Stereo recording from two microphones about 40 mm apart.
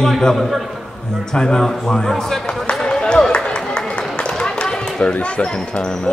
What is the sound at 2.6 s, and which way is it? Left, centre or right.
Run, left.